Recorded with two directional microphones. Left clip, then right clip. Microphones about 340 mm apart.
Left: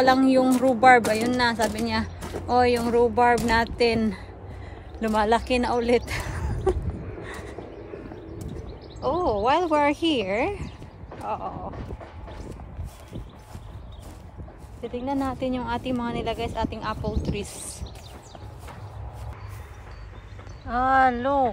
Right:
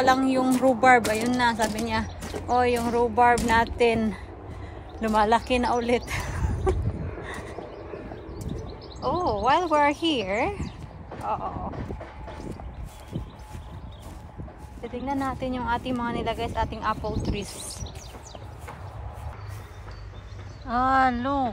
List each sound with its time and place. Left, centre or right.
0.0 s speech: centre
7.2 s a sound: centre
9.0 s speech: centre
15.0 s speech: centre
20.6 s speech: centre